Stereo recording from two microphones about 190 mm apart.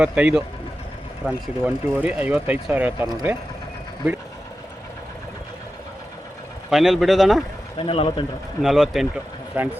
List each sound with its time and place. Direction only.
0.0 s speech: 5° right (ahead or behind)
6.7 s speech: centre (ahead or behind)
7.8 s speech: 30° left (ahead or behind)
8.6 s speech: centre (ahead or behind)